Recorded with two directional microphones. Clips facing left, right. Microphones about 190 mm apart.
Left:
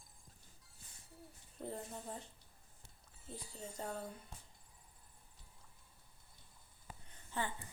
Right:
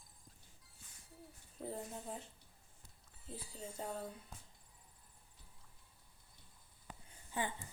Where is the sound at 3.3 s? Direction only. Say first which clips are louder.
Even; 5° right (ahead or behind).